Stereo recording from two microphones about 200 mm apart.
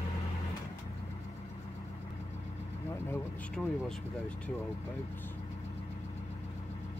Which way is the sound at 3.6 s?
5° left (ahead or behind).